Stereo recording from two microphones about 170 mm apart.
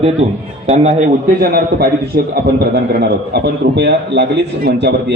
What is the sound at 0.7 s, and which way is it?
Speech, 40° right (ahead or behind).